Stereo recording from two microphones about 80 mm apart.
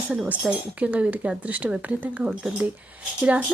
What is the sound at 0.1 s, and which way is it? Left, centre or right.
Speech, centre.